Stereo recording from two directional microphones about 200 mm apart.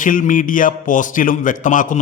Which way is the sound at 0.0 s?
40° left (ahead or behind).